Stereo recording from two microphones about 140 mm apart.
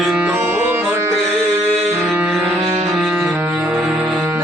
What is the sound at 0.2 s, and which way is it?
Music, 15° right (ahead or behind).